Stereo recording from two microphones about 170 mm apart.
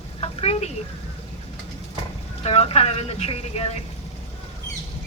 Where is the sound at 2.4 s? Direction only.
35° left (ahead or behind).